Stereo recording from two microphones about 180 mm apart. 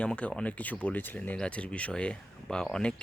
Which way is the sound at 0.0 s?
5° left (ahead or behind).